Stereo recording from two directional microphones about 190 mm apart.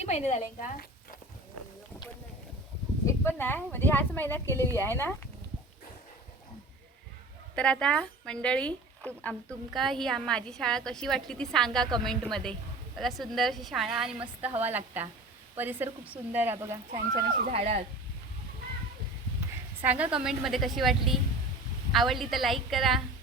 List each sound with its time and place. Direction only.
0.0 s a woman's voice: 35° left (ahead or behind)
3.1 s speech: 10° left (ahead or behind)
7.5 s speech: 5° left (ahead or behind); by 17.2 s 15° right (ahead or behind)
17.5 s speech: 35° right (ahead or behind)
19.8 s speech: 10° right (ahead or behind)